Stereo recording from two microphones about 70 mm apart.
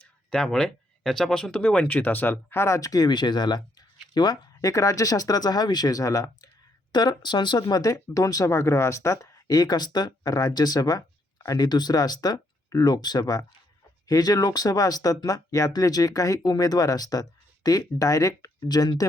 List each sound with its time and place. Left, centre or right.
0.3 s speech: centre; by 2.9 s left
2.9 s speech: left
6.9 s speech: left
8.4 s speech: left
11.4 s speech: left
15.7 s speech: left